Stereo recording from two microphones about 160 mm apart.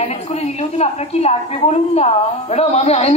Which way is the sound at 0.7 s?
40° left (ahead or behind).